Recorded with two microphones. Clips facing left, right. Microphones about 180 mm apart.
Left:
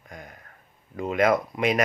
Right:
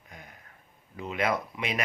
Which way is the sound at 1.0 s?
50° left (ahead or behind).